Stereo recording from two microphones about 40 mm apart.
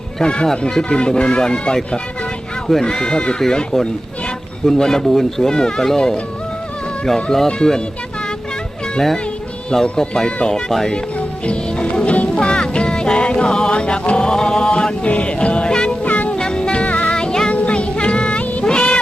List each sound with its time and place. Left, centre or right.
0.2 s speech: left
7.3 s speech: centre
10.0 s speech: centre
11.4 s music: left
16.0 s music: left
16.3 s music: left
17.1 s music: left
17.5 s music: left
18.6 s a sound: left